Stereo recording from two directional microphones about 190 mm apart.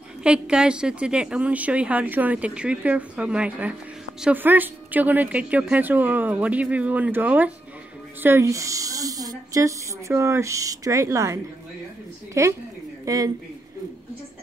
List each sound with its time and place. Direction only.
0.2 s a woman's voice: 5° right (ahead or behind)
12.4 s a woman's voice: 15° right (ahead or behind)